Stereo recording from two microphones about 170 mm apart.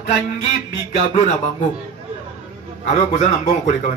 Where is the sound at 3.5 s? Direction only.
50° left (ahead or behind).